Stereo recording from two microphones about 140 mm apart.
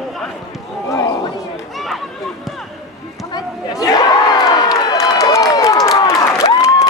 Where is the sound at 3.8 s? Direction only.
25° left (ahead or behind).